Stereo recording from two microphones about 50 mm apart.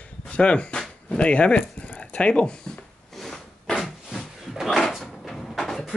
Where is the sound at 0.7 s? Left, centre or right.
Centre.